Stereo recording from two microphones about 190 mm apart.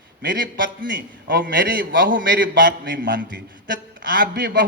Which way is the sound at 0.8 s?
65° right (ahead or behind).